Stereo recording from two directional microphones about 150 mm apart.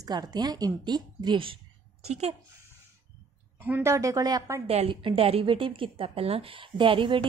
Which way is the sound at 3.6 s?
15° right (ahead or behind).